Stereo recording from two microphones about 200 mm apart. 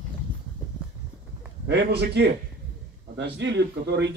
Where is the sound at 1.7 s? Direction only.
55° right (ahead or behind).